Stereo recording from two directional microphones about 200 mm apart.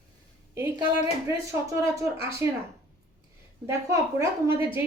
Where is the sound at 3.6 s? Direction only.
15° right (ahead or behind).